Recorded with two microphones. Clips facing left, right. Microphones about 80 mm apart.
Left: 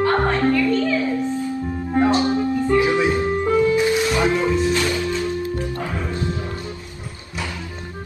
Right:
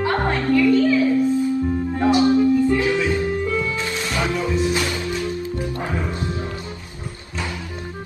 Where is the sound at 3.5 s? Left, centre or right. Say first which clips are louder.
Left 7 dB; left.